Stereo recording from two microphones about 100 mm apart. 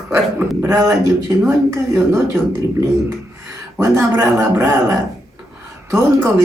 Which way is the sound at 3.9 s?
30° right (ahead or behind).